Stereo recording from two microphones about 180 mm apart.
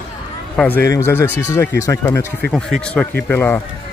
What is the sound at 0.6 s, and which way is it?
Speech, 10° left (ahead or behind).